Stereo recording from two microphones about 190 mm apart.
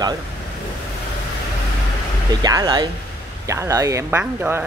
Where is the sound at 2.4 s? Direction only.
20° right (ahead or behind).